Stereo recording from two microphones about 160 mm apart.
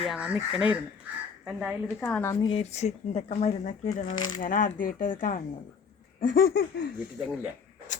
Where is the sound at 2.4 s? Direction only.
40° left (ahead or behind); by 5.4 s 55° left (ahead or behind).